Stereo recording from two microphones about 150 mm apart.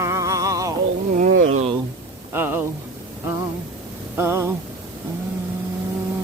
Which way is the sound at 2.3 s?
15° right (ahead or behind).